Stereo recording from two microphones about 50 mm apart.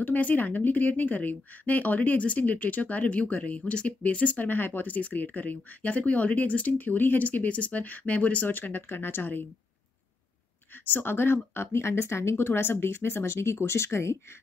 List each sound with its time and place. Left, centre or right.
0.0 s speech: left
10.9 s speech: left